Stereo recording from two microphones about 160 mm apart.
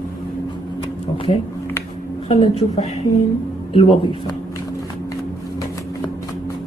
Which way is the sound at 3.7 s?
40° left (ahead or behind).